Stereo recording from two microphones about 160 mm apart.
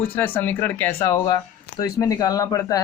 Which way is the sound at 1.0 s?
25° left (ahead or behind).